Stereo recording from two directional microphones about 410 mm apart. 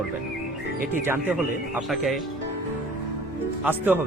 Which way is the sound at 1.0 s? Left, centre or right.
Centre.